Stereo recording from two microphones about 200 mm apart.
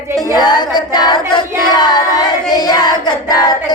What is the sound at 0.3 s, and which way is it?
Female singing, 20° left (ahead or behind).